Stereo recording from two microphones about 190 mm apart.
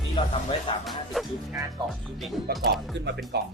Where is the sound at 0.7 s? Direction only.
25° left (ahead or behind).